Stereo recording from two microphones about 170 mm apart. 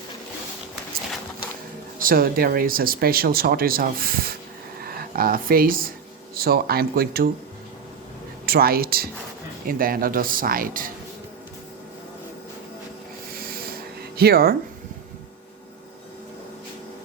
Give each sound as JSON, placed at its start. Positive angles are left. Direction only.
{"t": 2.0, "sound": "speech", "side_deg": -55}
{"t": 8.4, "sound": "speech", "side_deg": -65}
{"t": 13.3, "sound": "rub", "side_deg": -60}
{"t": 14.2, "sound": "speech", "side_deg": -65}